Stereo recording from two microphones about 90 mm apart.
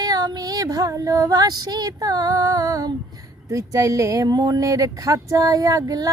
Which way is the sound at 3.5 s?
35° right (ahead or behind).